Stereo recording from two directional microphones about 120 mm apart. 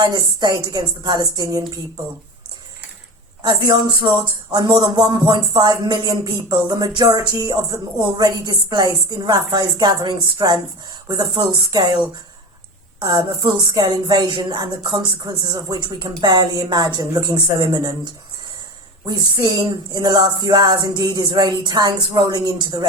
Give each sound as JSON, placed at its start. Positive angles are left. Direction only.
{"t": 0.0, "sound": "speech", "side_deg": -40}
{"t": 3.4, "sound": "speech", "side_deg": -40}